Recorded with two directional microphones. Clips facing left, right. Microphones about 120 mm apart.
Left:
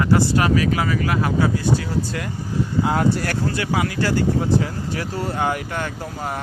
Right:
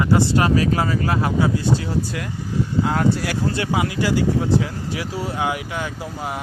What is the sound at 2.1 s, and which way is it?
Speech, 5° right (ahead or behind).